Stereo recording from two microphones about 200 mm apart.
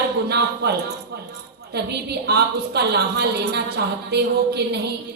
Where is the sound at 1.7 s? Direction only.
55° right (ahead or behind).